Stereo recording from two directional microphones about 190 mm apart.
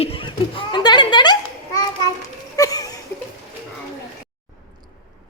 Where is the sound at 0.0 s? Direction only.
30° left (ahead or behind).